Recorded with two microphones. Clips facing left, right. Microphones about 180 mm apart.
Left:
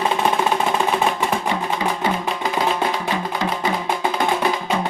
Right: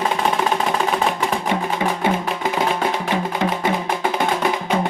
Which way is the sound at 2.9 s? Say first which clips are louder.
Right 2 dB; 20° right (ahead or behind).